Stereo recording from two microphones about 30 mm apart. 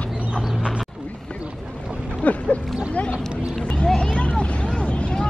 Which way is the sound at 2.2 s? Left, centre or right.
Left.